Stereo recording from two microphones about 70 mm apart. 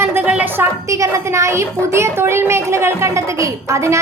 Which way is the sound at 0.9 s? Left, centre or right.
Right.